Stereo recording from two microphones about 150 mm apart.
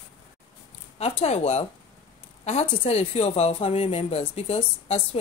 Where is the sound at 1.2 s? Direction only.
40° left (ahead or behind).